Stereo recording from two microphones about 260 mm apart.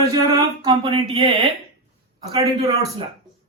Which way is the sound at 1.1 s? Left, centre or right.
Centre.